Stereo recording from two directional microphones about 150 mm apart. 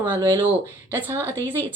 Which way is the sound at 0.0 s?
15° right (ahead or behind).